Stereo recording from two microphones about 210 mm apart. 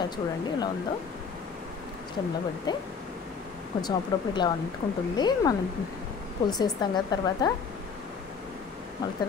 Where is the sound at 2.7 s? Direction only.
20° left (ahead or behind).